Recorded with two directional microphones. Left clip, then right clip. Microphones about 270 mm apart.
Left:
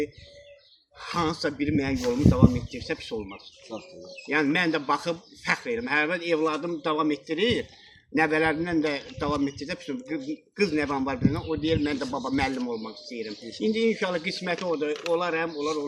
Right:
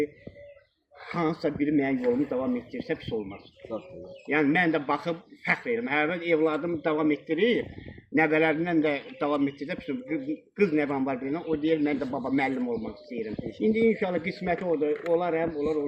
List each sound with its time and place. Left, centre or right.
1.1 s a man's voice: centre
3.7 s speech: centre
4.3 s a man's voice: centre